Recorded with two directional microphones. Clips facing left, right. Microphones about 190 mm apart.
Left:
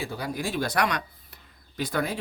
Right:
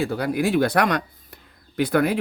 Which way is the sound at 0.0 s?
65° right (ahead or behind).